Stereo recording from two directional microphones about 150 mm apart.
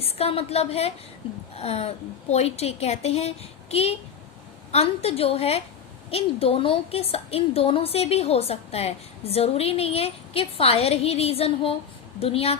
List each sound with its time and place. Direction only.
0.0 s a child's voice: 40° left (ahead or behind)